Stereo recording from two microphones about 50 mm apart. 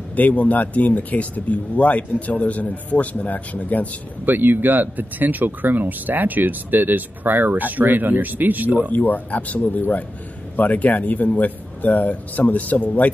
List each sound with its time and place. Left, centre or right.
0.1 s speech: left
4.3 s speech: right
8.9 s speech: left